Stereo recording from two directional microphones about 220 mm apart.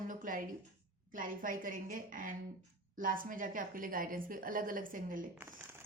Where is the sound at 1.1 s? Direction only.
40° right (ahead or behind).